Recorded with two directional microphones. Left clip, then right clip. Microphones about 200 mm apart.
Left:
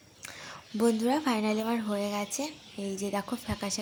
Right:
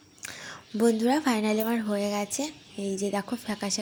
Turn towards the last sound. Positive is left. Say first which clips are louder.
# right 3 dB
turn(degrees=-10)  # may be behind; listen again after turning